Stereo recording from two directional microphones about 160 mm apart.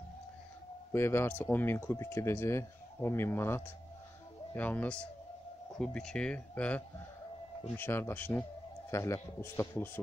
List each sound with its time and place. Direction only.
0.9 s speech: 15° left (ahead or behind)